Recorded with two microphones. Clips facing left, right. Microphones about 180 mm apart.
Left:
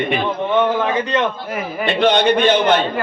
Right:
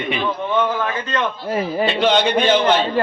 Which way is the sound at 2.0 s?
55° left (ahead or behind).